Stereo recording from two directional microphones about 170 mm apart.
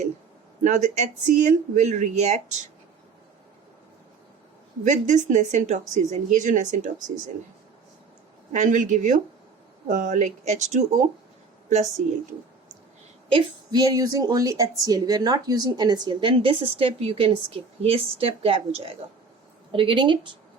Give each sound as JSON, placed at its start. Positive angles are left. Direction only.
{"t": 0.6, "sound": "speech", "side_deg": -45}
{"t": 4.8, "sound": "speech", "side_deg": -45}
{"t": 8.5, "sound": "speech", "side_deg": -50}
{"t": 13.2, "sound": "a woman's voice", "side_deg": -25}